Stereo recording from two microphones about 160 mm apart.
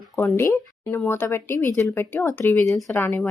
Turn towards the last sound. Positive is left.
turn(degrees=10)  # may be behind; listen again after turning